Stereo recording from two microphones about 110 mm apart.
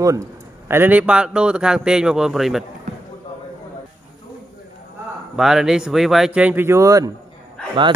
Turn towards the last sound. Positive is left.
turn(degrees=10)  # may be behind; listen again after turning